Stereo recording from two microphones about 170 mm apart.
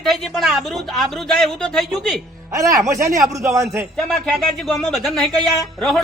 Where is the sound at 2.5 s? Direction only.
20° right (ahead or behind).